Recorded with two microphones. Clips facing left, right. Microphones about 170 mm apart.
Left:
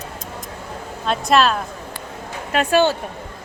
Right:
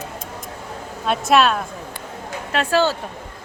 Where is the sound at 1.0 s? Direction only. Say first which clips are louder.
Even; 5° right (ahead or behind).